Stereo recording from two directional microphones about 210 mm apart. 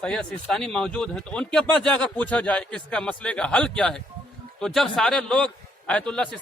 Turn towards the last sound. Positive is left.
turn(degrees=5)  # may be behind; listen again after turning